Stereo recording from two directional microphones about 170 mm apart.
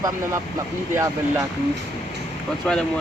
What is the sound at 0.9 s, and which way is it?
Speech, 20° right (ahead or behind).